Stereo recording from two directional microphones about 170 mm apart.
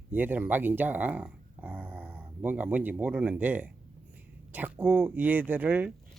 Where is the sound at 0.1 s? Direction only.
10° right (ahead or behind).